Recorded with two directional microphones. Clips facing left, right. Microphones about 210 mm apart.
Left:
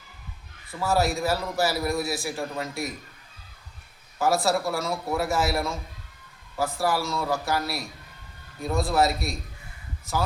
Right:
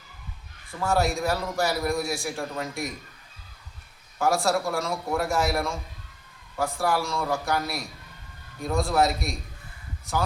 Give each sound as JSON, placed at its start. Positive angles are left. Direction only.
{"t": 0.7, "sound": "a man's voice", "side_deg": 0}
{"t": 4.2, "sound": "a man's voice", "side_deg": 0}